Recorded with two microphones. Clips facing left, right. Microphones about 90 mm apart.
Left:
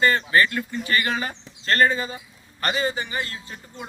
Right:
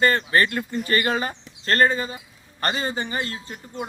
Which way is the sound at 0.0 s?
40° right (ahead or behind).